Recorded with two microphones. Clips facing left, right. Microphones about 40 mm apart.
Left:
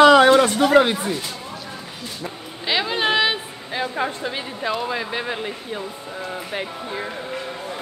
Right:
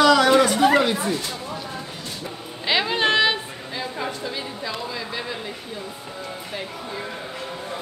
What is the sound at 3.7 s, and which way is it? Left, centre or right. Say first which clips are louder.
Speech: left 5 dB; left.